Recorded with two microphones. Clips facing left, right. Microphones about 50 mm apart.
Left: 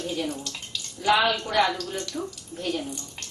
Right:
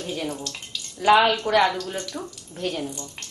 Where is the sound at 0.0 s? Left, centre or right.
Centre.